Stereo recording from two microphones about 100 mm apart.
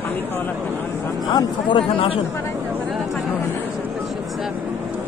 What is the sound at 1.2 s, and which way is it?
Speech, 50° left (ahead or behind).